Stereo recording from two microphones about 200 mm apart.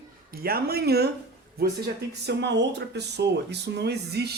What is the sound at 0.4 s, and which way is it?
Speech, 50° right (ahead or behind).